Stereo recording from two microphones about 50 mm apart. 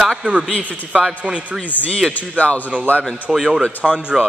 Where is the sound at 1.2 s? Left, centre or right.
Centre.